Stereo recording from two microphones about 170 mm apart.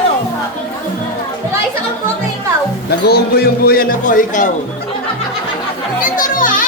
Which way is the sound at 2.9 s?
70° left (ahead or behind).